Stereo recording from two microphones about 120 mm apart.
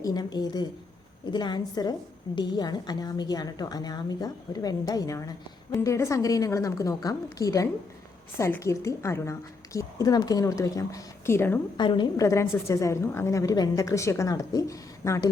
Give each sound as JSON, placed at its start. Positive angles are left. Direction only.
{"t": 0.0, "sound": "a woman's voice", "side_deg": 35}
{"t": 11.8, "sound": "a woman's voice", "side_deg": 40}
{"t": 12.2, "sound": "a woman's voice", "side_deg": 25}